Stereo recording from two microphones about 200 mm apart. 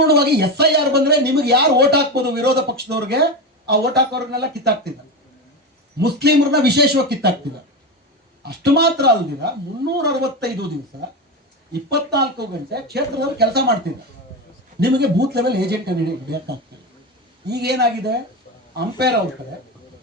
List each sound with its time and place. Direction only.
0.1 s speech: 55° right (ahead or behind)
6.0 s speech: 55° right (ahead or behind)
8.4 s speech: 55° right (ahead or behind)
11.7 s speech: 55° right (ahead or behind)
14.8 s speech: 55° right (ahead or behind)